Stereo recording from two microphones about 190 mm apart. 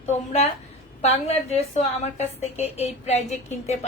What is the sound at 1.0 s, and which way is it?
A woman's voice, 35° left (ahead or behind).